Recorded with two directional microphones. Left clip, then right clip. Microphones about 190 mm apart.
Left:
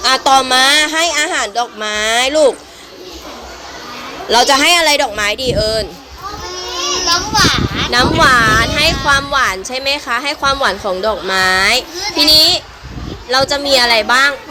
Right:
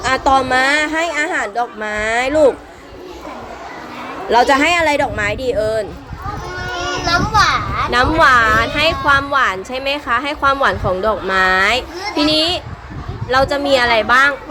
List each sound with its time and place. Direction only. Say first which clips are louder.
0.0 s a woman's voice: left 3 dB; centre (ahead or behind)
4.3 s a woman's voice: left 2 dB; centre (ahead or behind)
7.9 s a woman's voice: left 1 dB; centre (ahead or behind)